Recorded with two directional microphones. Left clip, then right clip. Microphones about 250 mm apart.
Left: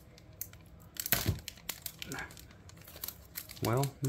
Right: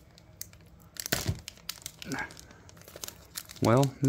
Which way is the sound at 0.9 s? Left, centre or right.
Centre.